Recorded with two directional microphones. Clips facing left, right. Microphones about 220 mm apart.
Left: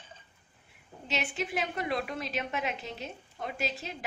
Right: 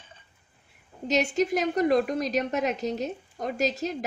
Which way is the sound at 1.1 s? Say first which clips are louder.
Right 10 dB; 40° right (ahead or behind).